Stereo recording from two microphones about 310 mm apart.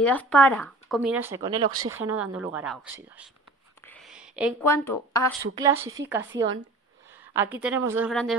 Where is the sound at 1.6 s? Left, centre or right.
Right.